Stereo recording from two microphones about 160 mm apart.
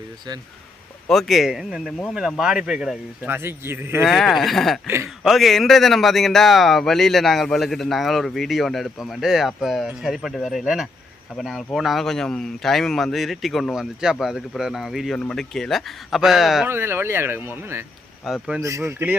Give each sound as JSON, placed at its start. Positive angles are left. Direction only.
{"t": 1.0, "sound": "speech", "side_deg": 0}
{"t": 4.0, "sound": "speech", "side_deg": 0}
{"t": 16.6, "sound": "speech", "side_deg": -15}
{"t": 18.3, "sound": "speech", "side_deg": 0}
{"t": 18.6, "sound": "speech", "side_deg": -20}